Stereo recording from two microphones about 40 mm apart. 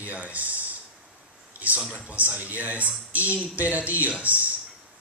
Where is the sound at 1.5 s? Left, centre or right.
Right.